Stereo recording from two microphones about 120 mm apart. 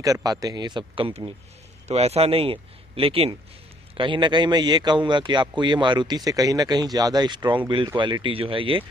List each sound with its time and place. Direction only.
0.0 s speech: 30° right (ahead or behind); by 1.3 s 45° right (ahead or behind)
1.9 s speech: 60° right (ahead or behind)